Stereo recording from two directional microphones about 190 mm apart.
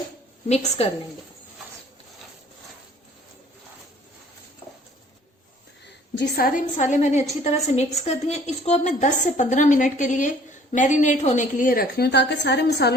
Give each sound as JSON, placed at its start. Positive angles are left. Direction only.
{"t": 0.4, "sound": "a woman's voice", "side_deg": 35}
{"t": 5.8, "sound": "a woman's voice", "side_deg": 60}